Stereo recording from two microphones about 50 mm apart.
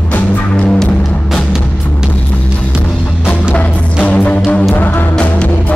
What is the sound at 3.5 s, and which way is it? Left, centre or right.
Music, left.